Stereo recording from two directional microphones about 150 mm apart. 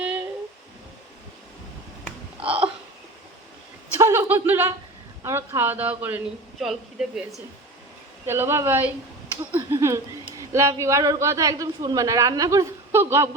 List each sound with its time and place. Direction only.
2.4 s hiccup: 35° right (ahead or behind)
3.9 s chuckle: 15° right (ahead or behind)
5.2 s speech: 15° right (ahead or behind)
6.6 s speech: centre (ahead or behind)
8.3 s a woman's voice: 15° right (ahead or behind)